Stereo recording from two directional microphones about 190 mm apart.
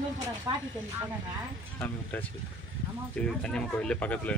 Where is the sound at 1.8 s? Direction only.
10° left (ahead or behind).